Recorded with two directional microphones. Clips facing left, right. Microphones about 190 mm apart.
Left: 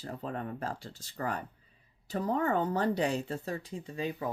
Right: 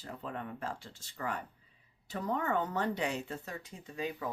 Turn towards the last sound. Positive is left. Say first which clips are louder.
# left 3 dB
turn(degrees=30)  # may be behind; listen again after turning